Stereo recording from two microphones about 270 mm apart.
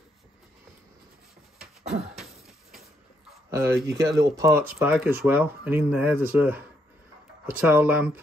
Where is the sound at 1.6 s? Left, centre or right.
Right.